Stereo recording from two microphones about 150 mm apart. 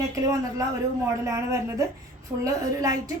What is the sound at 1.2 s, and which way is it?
Speech, 20° right (ahead or behind).